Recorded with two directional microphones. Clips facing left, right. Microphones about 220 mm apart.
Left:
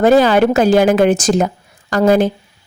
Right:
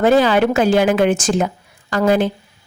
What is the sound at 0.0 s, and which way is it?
A woman's voice, 40° left (ahead or behind).